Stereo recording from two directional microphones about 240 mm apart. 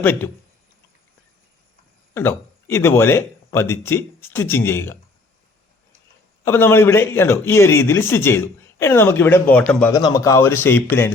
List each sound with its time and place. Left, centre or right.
0.0 s a man's voice: centre
2.1 s a man's voice: centre
6.4 s a man's voice: centre